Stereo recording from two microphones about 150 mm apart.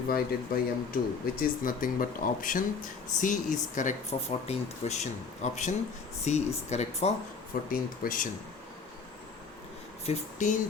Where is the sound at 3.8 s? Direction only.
55° left (ahead or behind).